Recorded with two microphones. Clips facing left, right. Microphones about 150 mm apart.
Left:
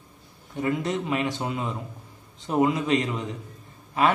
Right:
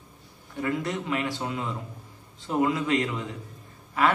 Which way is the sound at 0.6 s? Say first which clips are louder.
Left 3 dB; 20° left (ahead or behind).